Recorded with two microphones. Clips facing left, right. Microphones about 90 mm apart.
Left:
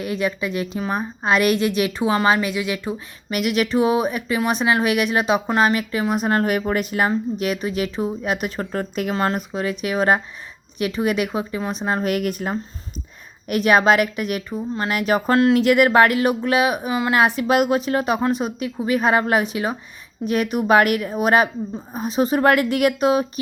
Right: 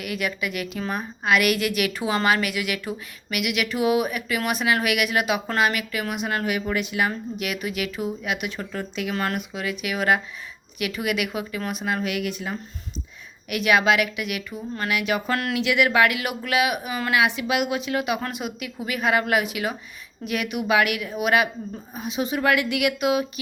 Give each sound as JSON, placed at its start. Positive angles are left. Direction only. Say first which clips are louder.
{"t": 0.0, "sound": "a woman's voice", "louder": "left 5 dB", "side_deg": 30}
{"t": 3.3, "sound": "a woman's voice", "louder": "left 6 dB", "side_deg": 35}
{"t": 9.1, "sound": "speech", "louder": "left 5 dB", "side_deg": 30}